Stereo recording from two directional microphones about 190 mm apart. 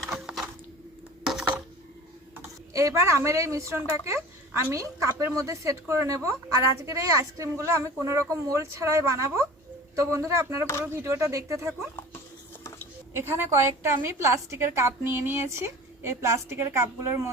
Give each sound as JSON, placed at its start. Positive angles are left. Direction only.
{"t": 0.1, "sound": "crack", "side_deg": -5}
{"t": 1.2, "sound": "a sound", "side_deg": -5}
{"t": 2.7, "sound": "a woman's voice", "side_deg": -15}
{"t": 13.1, "sound": "a woman's voice", "side_deg": -15}